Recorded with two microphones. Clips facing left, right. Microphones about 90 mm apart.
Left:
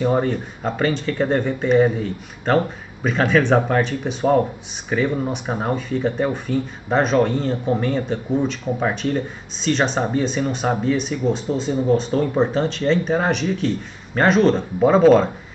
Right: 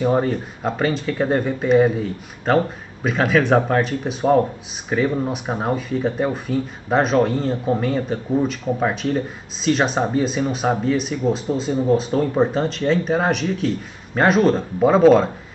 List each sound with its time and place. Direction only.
0.0 s speech: 5° right (ahead or behind)